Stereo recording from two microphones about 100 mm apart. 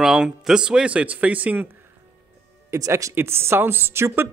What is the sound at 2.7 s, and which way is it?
Speech, 30° right (ahead or behind).